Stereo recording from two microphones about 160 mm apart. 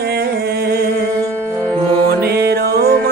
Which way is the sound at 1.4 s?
15° right (ahead or behind).